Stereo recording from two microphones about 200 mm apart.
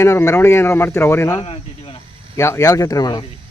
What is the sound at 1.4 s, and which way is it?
Cricket, 30° left (ahead or behind).